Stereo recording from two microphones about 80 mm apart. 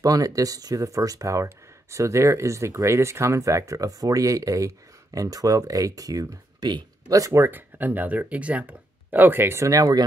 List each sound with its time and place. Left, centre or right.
0.0 s speech: right